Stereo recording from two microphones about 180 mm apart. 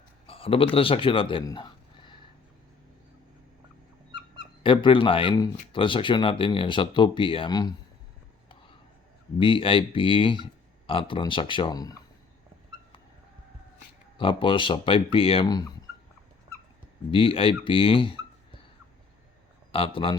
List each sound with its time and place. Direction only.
0.3 s speech: 30° left (ahead or behind)
4.6 s speech: 30° left (ahead or behind)
9.4 s speech: 30° left (ahead or behind)
14.2 s speech: 30° left (ahead or behind)
17.1 s speech: 30° left (ahead or behind)
19.7 s speech: 30° left (ahead or behind)